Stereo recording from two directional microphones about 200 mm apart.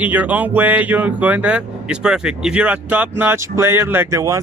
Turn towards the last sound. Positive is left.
turn(degrees=-15)  # may be behind; listen again after turning